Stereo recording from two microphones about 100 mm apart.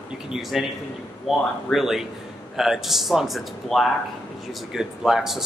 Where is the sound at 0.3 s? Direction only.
Centre (ahead or behind).